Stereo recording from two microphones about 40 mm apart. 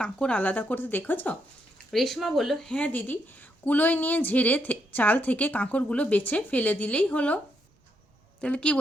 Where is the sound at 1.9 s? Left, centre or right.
Centre.